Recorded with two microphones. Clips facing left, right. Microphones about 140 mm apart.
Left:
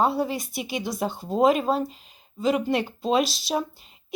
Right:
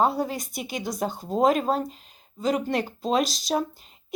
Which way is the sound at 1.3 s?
5° left (ahead or behind).